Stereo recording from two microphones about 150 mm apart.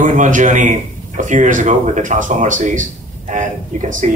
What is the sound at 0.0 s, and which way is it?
A man's voice, 60° right (ahead or behind).